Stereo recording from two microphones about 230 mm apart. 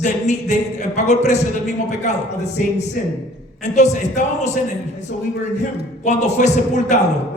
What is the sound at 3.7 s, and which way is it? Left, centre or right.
Speech, left.